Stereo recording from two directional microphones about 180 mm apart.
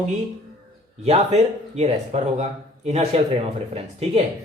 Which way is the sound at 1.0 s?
35° right (ahead or behind).